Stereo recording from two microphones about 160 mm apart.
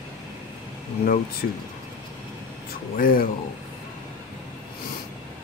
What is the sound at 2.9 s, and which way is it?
Speech, 65° left (ahead or behind).